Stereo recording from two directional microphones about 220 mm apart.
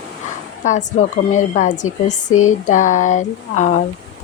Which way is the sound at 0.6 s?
35° left (ahead or behind).